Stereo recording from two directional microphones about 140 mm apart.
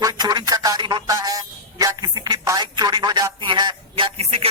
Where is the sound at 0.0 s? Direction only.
30° right (ahead or behind).